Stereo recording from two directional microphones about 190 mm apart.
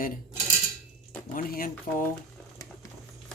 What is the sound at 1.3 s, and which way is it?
Speech, 45° left (ahead or behind).